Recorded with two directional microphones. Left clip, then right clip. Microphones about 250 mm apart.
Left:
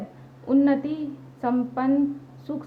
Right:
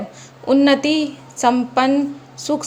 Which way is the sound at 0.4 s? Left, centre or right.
Right.